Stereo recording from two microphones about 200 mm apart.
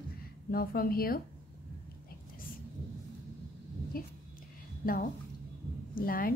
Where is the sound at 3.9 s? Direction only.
45° left (ahead or behind).